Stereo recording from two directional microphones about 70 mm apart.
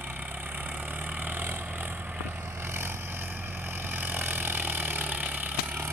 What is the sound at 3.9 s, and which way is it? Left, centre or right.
Vehicle, right.